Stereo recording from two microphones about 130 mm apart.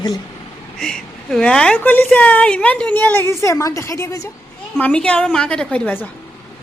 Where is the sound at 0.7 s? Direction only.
5° left (ahead or behind); by 4.2 s 25° left (ahead or behind).